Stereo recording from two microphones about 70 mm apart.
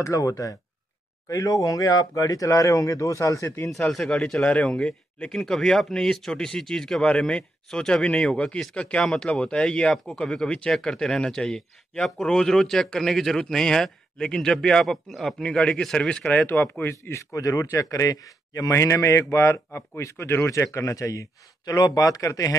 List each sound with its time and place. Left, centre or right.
0.0 s speech: left
3.9 s a man's voice: centre
16.8 s speech: left